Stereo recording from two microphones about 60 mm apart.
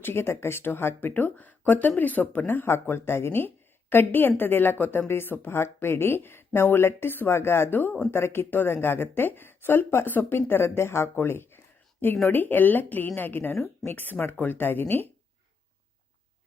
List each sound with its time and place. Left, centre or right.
0.0 s speech: left
2.6 s speech: left